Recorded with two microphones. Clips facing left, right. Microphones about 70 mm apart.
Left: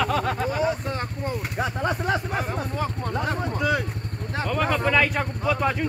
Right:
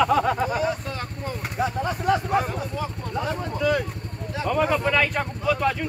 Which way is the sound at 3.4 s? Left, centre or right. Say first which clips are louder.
Right 3 dB; centre.